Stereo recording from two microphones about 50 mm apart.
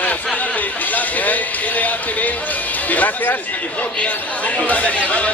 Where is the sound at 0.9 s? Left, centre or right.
Left.